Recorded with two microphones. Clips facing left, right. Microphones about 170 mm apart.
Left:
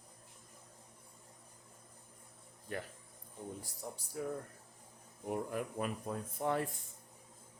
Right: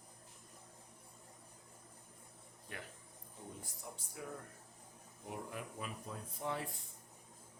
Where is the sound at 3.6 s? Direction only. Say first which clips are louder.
Left 5 dB; 35° left (ahead or behind).